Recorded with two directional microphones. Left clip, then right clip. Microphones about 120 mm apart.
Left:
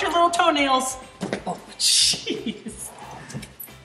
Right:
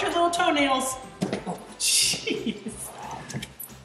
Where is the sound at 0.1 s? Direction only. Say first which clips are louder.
Left 5 dB; 15° left (ahead or behind).